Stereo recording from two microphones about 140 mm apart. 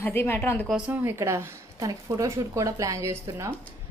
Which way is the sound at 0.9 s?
20° right (ahead or behind).